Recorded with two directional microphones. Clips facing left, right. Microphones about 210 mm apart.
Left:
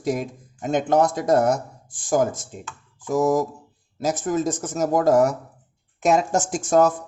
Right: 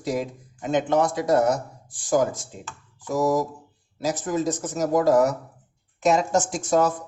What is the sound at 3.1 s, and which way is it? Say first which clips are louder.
Speech: left 2 dB; 50° left (ahead or behind).